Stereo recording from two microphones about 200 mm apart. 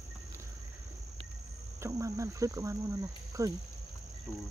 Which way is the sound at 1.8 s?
15° right (ahead or behind).